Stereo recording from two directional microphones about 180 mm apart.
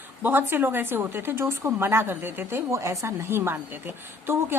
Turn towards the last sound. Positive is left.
turn(degrees=-10)  # may be behind; listen again after turning